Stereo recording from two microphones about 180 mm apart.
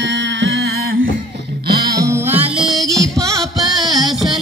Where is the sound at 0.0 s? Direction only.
85° right; by 1.1 s 60° right (ahead or behind).